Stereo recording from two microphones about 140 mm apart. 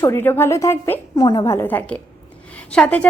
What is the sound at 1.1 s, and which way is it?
A woman's voice, 30° left (ahead or behind).